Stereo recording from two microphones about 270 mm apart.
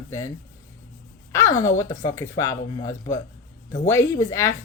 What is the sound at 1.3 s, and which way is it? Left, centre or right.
Speech, centre.